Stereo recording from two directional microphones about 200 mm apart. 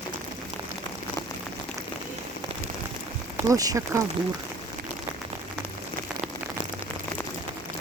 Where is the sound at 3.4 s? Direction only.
15° right (ahead or behind).